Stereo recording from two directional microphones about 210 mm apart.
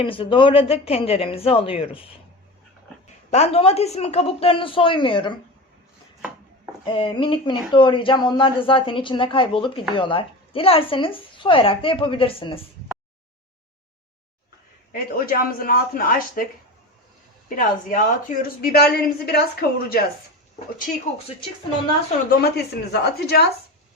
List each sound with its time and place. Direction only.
0.0 s speech: 25° left (ahead or behind)
3.2 s speech: 30° left (ahead or behind)
6.8 s speech: 25° left (ahead or behind)
14.9 s a woman's voice: 45° left (ahead or behind)
17.5 s a woman's voice: 40° left (ahead or behind)
22.3 s a woman's voice: 50° left (ahead or behind)